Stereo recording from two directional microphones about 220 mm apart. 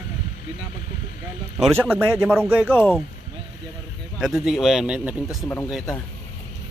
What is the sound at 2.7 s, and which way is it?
Speech, 10° left (ahead or behind).